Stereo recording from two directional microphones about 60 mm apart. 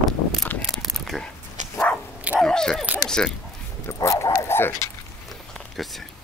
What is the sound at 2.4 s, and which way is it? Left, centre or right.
Keys jangling, centre.